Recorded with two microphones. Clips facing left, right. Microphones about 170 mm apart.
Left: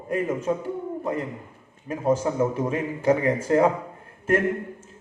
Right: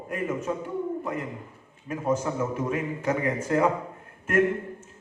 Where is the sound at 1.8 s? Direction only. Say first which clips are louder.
Left 4 dB; 30° left (ahead or behind).